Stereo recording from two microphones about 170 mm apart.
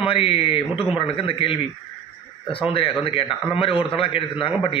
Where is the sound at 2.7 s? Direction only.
30° left (ahead or behind).